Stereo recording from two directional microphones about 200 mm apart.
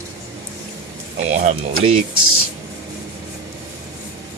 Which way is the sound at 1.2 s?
35° right (ahead or behind).